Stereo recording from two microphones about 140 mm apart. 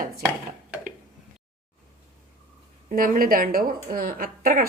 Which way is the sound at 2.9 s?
90° right.